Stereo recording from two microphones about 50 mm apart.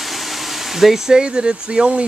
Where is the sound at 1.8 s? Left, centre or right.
Centre.